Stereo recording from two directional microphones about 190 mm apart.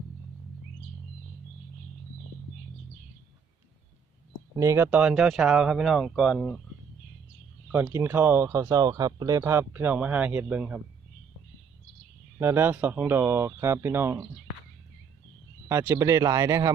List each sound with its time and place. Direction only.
4.5 s speech: 15° right (ahead or behind)
7.7 s speech: 10° right (ahead or behind)
12.4 s speech: 10° right (ahead or behind)
15.7 s speech: 10° right (ahead or behind)